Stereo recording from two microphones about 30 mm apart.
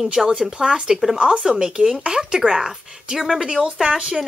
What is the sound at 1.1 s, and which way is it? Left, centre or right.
Speech, right.